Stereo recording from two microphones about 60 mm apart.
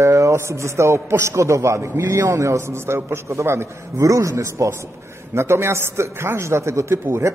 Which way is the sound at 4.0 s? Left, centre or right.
Right.